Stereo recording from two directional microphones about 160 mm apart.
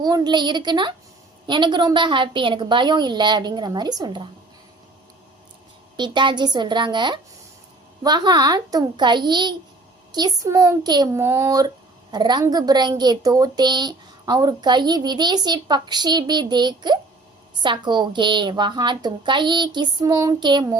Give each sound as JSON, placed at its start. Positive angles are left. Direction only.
{"t": 0.0, "sound": "a woman's voice", "side_deg": -25}
{"t": 6.0, "sound": "a woman's voice", "side_deg": -30}